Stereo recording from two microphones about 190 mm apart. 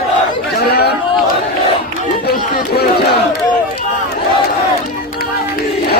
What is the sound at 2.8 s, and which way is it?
Crowd, 55° left (ahead or behind).